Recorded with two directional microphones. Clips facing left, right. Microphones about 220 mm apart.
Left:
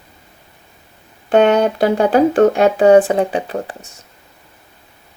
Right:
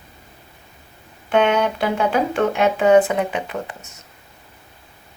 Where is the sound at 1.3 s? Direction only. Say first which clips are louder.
Left 5 dB; 40° left (ahead or behind).